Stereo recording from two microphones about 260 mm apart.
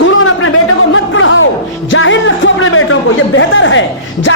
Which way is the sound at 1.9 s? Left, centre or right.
Left.